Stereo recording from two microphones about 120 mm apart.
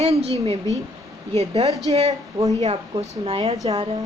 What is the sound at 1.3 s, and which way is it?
A woman's voice, 60° right (ahead or behind).